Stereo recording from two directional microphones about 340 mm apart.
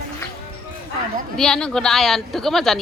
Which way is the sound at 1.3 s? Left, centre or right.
Centre.